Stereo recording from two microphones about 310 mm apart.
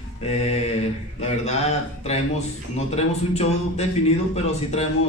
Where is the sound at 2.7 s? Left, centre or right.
Left.